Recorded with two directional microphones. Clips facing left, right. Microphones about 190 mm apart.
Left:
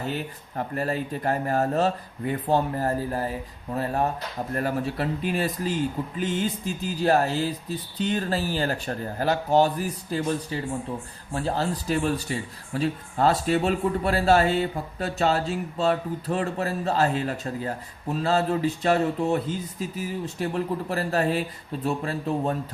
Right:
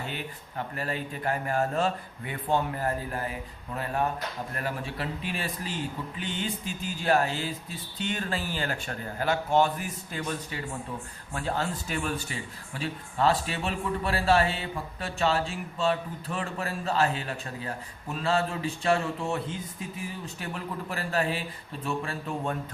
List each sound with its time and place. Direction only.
0.1 s speech: 40° left (ahead or behind)
20.4 s speech: 40° left (ahead or behind)